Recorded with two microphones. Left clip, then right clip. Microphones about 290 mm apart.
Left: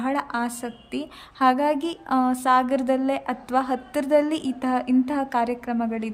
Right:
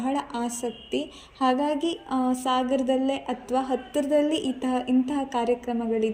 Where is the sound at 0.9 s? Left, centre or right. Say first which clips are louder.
Right 2 dB; centre.